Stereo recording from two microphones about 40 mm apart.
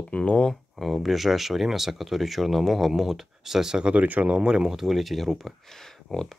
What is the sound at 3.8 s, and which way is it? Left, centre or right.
Speech, right.